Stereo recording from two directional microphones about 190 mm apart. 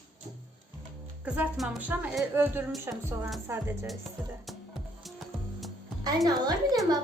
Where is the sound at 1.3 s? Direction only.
5° right (ahead or behind).